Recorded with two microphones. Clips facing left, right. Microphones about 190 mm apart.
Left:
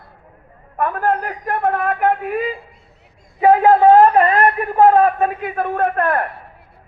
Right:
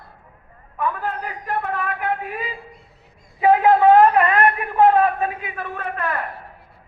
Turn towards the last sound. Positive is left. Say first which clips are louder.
# left 8 dB
turn(degrees=55)  # may be behind; listen again after turning